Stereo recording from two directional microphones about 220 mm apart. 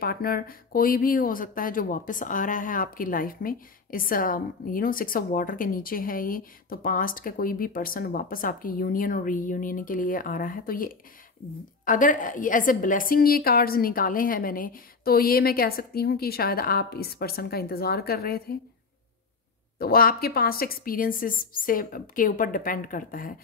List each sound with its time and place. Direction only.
0.0 s a woman's voice: 45° left (ahead or behind)
19.8 s speech: 40° left (ahead or behind)